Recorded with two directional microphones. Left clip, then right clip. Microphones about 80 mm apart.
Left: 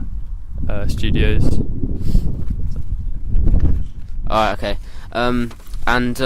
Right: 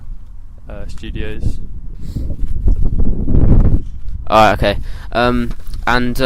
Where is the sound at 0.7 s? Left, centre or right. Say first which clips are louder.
Left 7 dB; left.